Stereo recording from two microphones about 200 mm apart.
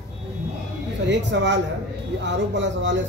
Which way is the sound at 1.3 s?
60° right (ahead or behind).